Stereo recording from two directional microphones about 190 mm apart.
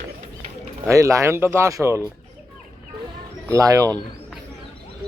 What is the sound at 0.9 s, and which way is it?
Speech, 15° right (ahead or behind).